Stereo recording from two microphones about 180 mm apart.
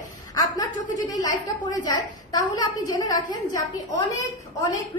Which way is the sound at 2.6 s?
20° left (ahead or behind).